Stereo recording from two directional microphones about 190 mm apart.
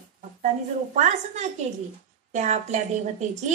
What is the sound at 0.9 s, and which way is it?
A woman's voice, 40° right (ahead or behind).